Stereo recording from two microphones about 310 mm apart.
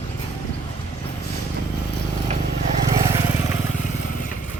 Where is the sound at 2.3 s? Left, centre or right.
Right.